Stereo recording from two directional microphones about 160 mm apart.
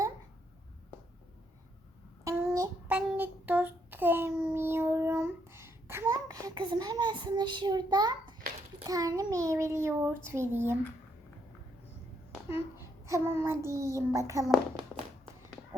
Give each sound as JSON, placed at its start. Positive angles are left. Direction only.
{"t": 2.2, "sound": "a sound", "side_deg": -20}
{"t": 2.8, "sound": "child singing", "side_deg": -10}
{"t": 8.8, "sound": "a child's voice", "side_deg": -20}
{"t": 12.5, "sound": "a child's voice", "side_deg": -15}